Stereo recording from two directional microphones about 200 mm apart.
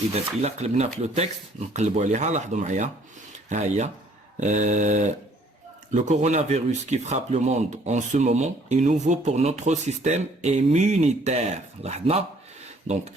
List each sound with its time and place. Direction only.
0.1 s speech: 35° right (ahead or behind)